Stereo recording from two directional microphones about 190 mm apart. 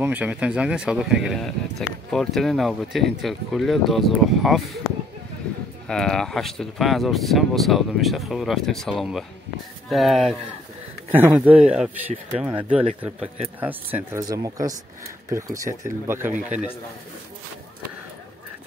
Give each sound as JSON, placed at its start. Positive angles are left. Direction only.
{"t": 0.0, "sound": "speech", "side_deg": -10}
{"t": 5.9, "sound": "speech", "side_deg": 5}
{"t": 16.3, "sound": "a man's voice", "side_deg": -40}